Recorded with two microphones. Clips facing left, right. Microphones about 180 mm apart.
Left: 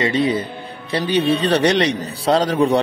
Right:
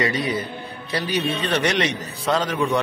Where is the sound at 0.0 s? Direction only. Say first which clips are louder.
Left 5 dB; 30° left (ahead or behind).